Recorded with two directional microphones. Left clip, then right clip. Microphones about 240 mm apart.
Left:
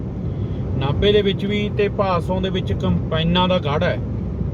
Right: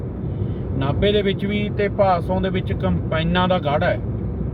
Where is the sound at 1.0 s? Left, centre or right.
Centre.